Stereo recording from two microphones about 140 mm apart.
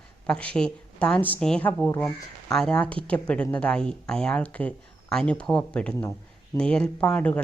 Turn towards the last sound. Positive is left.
turn(degrees=10)  # may be behind; listen again after turning